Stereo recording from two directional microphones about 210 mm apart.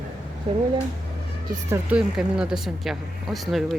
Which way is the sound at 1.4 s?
10° right (ahead or behind).